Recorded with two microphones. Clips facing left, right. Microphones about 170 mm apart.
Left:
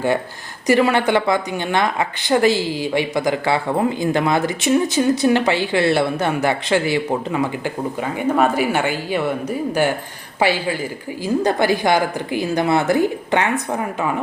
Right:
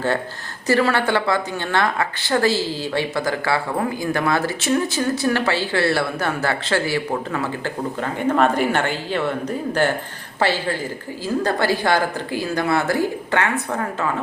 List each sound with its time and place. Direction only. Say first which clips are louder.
0.7 s a woman's voice: left 3 dB; 15° left (ahead or behind)